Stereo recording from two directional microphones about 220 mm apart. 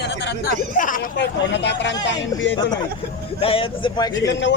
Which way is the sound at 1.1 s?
50° left (ahead or behind).